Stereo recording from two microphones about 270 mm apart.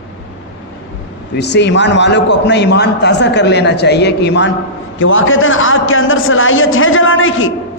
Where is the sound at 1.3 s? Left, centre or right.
Left.